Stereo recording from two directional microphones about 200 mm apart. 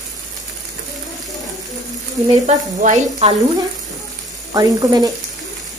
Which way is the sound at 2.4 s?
35° right (ahead or behind).